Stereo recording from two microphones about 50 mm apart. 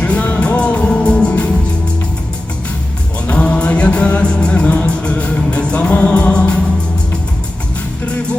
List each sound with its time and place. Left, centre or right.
0.0 s music: left
3.4 s music: left